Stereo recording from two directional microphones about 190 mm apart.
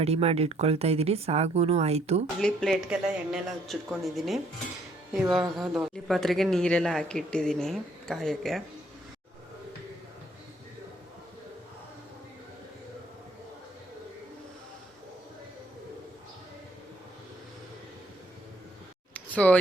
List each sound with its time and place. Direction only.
0.0 s speech: 35° right (ahead or behind)
2.4 s a man's voice: centre (ahead or behind)
5.5 s a man's voice: centre (ahead or behind)
19.1 s a sound: 5° left (ahead or behind)